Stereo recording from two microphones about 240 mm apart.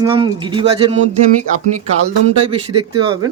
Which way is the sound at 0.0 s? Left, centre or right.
Centre.